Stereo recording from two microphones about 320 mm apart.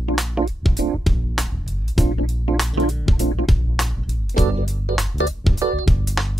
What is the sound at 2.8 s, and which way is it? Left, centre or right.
Music, centre.